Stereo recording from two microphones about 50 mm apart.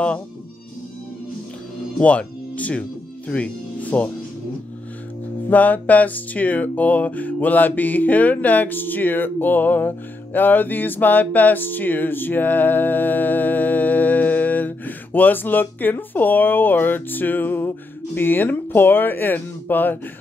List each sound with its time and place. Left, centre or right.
2.0 s speech: left
5.5 s music: left